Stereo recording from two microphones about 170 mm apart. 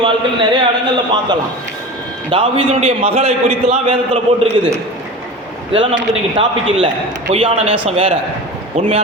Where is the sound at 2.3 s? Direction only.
30° right (ahead or behind).